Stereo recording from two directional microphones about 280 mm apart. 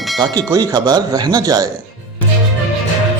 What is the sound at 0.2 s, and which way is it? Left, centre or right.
Speech, centre.